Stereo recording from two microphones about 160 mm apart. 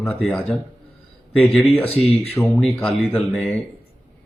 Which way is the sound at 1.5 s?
Centre (ahead or behind).